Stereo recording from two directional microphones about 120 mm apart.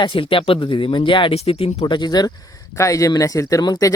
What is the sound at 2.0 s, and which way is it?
Speech, 35° left (ahead or behind).